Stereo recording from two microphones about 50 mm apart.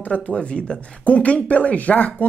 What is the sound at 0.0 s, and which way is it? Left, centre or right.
Speech, left.